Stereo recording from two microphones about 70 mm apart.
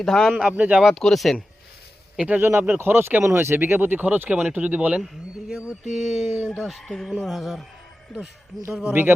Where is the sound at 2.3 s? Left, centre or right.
Right; by 5.0 s centre.